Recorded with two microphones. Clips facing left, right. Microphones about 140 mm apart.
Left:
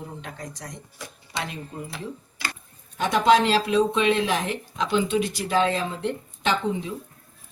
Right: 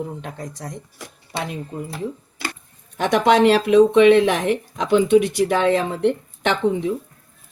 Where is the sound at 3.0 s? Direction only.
70° right (ahead or behind).